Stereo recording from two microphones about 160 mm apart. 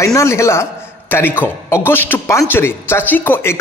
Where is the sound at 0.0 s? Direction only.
20° left (ahead or behind).